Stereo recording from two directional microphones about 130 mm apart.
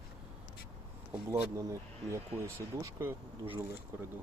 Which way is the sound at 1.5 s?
20° right (ahead or behind).